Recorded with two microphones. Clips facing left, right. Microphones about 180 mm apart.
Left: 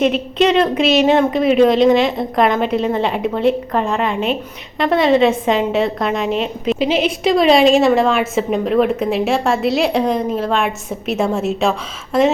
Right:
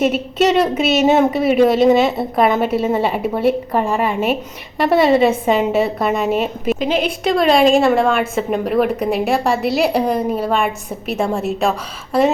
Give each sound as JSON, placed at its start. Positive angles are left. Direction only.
{"t": 0.0, "sound": "a woman's voice", "side_deg": -5}